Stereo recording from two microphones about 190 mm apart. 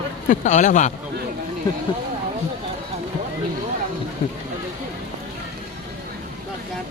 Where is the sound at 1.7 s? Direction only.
20° left (ahead or behind).